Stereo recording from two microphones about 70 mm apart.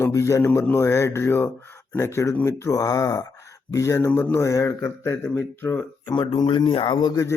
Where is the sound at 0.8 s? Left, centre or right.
Left.